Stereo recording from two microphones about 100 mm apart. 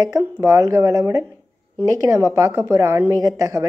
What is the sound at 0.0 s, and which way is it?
A woman's voice, 30° right (ahead or behind).